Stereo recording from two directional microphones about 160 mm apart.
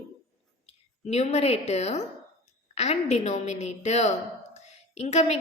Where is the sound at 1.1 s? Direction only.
45° left (ahead or behind).